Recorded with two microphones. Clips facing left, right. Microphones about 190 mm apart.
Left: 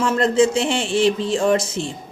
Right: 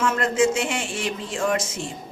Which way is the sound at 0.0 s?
35° left (ahead or behind).